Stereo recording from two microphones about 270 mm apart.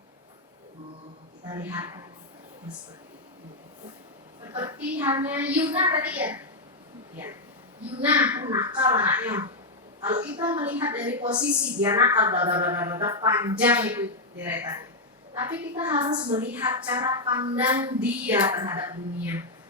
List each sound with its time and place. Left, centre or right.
1.5 s a woman's voice: centre
4.5 s a woman's voice: centre
16.0 s a woman's voice: centre